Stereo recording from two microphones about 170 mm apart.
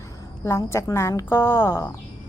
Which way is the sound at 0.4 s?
15° left (ahead or behind).